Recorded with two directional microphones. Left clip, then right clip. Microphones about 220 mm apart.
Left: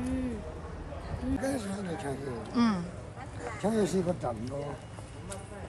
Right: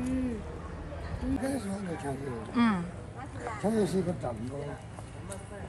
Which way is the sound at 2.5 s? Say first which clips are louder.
Right 1 dB; 10° left (ahead or behind).